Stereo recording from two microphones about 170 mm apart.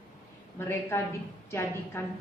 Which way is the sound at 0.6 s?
15° left (ahead or behind).